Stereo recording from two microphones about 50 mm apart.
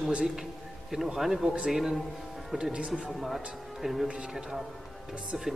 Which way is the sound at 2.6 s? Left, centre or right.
Centre.